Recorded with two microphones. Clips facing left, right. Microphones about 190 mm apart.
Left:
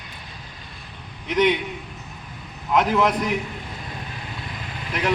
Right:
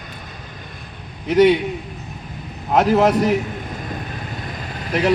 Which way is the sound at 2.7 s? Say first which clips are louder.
Right 5 dB; 35° right (ahead or behind).